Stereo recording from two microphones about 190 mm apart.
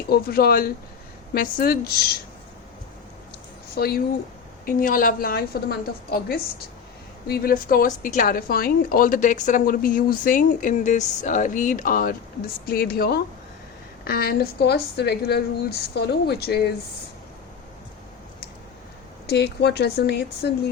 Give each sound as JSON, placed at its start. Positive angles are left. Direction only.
{"t": 0.1, "sound": "a woman's voice", "side_deg": 55}
{"t": 3.8, "sound": "a woman's voice", "side_deg": 55}
{"t": 19.3, "sound": "a woman's voice", "side_deg": 60}